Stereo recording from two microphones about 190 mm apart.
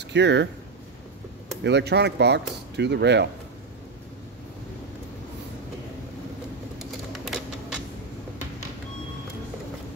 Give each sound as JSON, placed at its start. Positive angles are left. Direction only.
{"t": 0.0, "sound": "speech", "side_deg": -65}
{"t": 1.6, "sound": "speech", "side_deg": -65}
{"t": 6.8, "sound": "a sound", "side_deg": 0}